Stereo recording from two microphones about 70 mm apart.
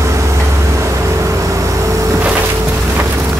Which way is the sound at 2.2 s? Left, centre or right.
Right.